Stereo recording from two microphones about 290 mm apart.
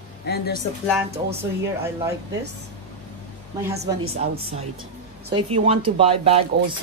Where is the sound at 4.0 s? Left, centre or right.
Right.